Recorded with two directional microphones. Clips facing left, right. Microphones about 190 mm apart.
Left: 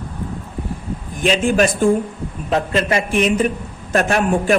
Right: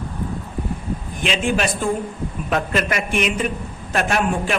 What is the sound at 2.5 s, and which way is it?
A woman's voice, 30° left (ahead or behind).